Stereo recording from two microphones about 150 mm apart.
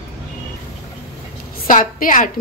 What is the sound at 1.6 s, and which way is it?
Speech, 65° left (ahead or behind).